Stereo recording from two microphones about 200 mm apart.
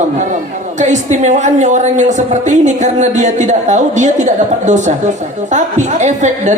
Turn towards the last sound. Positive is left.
turn(degrees=-35)  # may be behind; listen again after turning